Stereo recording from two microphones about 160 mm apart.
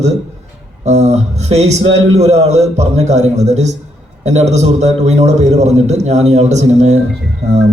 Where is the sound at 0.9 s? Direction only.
45° right (ahead or behind).